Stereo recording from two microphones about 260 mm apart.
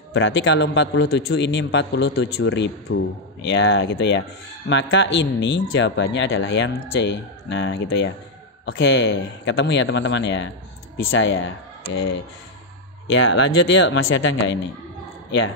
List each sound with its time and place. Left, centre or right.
0.1 s speech: left
13.1 s speech: left